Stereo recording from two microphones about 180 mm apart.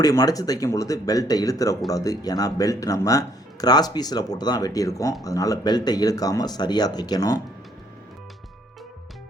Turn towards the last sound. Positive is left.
turn(degrees=20)  # may be behind; listen again after turning